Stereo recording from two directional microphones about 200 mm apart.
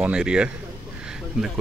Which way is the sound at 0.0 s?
5° right (ahead or behind).